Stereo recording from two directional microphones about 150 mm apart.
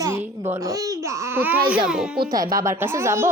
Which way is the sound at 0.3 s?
20° right (ahead or behind).